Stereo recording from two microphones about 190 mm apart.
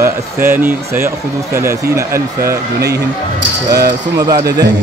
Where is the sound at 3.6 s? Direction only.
20° right (ahead or behind).